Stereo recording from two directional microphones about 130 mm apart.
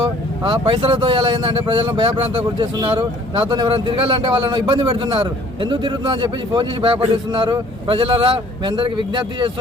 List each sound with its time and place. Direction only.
0.6 s speech: 45° right (ahead or behind)